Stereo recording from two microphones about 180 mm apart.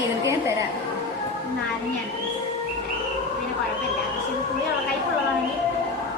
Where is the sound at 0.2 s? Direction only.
15° right (ahead or behind).